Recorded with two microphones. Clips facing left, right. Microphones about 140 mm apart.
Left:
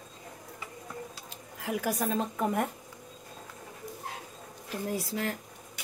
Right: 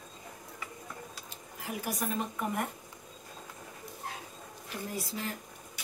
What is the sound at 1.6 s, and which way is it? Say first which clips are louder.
Speech: left 5 dB; 90° left.